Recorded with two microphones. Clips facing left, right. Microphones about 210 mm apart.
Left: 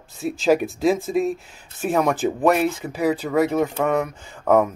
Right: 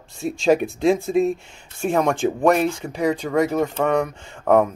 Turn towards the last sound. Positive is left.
turn(degrees=5)  # may be behind; listen again after turning